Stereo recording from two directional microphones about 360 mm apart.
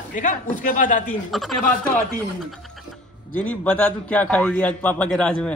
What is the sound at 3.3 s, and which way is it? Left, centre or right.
A man's voice, centre.